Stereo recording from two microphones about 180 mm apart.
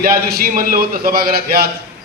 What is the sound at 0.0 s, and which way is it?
A man's voice, 55° right (ahead or behind).